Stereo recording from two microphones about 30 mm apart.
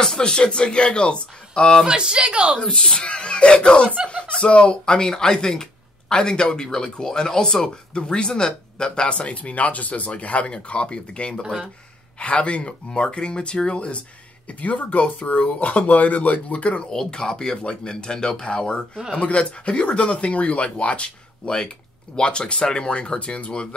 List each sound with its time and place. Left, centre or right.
0.2 s speech: left
1.9 s speech: right
2.7 s speech: left
9.0 s speech: left
9.4 s speech: left
14.5 s speech: left
17.0 s speech: left
19.7 s speech: left
20.0 s speech: left
21.5 s speech: left